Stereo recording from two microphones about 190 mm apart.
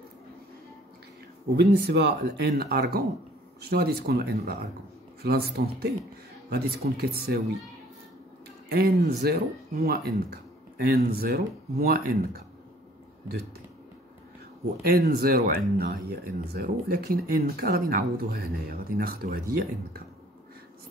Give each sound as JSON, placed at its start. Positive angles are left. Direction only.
{"t": 1.6, "sound": "speech", "side_deg": -60}
{"t": 8.6, "sound": "speech", "side_deg": -60}
{"t": 14.8, "sound": "speech", "side_deg": -55}